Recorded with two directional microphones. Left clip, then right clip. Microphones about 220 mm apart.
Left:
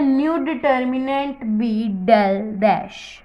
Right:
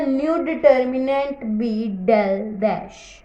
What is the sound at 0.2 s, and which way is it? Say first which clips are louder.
Speech: right 2 dB; 10° left (ahead or behind).